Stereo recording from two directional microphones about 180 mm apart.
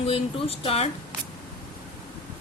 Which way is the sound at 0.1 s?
30° left (ahead or behind).